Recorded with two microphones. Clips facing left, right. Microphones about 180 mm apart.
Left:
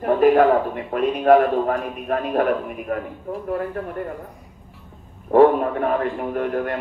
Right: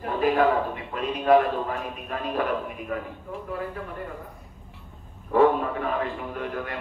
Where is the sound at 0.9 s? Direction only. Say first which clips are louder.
Left 5 dB; 50° left (ahead or behind).